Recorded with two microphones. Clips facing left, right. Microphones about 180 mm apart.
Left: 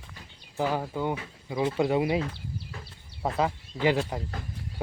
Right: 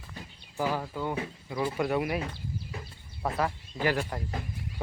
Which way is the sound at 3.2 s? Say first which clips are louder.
Left 3 dB; 20° left (ahead or behind).